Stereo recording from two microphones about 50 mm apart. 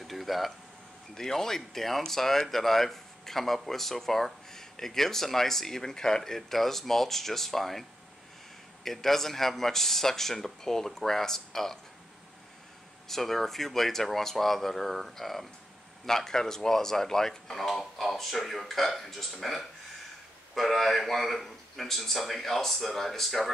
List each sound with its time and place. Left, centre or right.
0.0 s speech: centre
8.8 s speech: centre
13.1 s speech: centre